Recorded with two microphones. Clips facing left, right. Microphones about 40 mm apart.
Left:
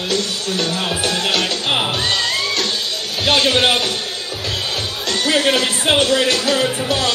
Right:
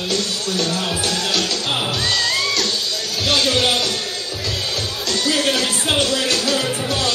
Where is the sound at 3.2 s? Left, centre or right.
Left.